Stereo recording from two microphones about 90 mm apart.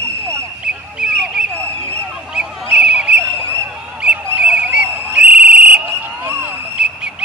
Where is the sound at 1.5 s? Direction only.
15° left (ahead or behind).